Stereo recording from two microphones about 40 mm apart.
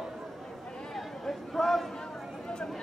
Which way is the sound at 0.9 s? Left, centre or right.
Centre.